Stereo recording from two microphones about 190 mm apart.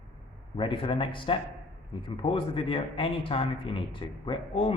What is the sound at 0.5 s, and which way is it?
Speech, 30° left (ahead or behind).